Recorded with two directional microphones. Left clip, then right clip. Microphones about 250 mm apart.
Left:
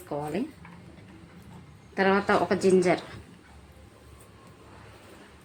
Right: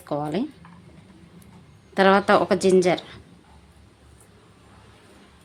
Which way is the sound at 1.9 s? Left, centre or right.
Right.